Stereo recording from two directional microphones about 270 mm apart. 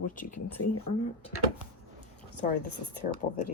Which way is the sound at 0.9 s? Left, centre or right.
Left.